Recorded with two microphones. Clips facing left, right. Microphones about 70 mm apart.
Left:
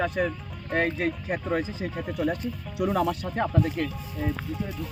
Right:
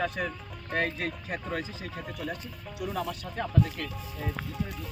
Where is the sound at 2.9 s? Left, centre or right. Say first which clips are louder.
Left 8 dB; left.